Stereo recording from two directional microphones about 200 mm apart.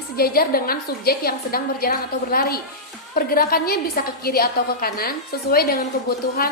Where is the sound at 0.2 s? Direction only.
50° left (ahead or behind).